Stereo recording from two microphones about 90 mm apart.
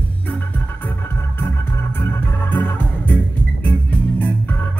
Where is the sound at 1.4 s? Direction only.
25° left (ahead or behind).